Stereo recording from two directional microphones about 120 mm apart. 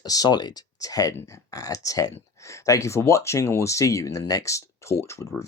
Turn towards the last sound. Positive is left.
turn(degrees=25)  # may be behind; listen again after turning